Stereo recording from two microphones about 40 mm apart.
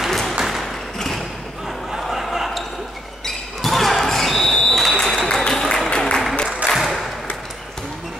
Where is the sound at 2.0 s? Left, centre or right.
Centre.